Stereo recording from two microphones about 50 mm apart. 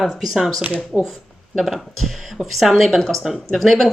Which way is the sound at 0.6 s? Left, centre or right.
Right.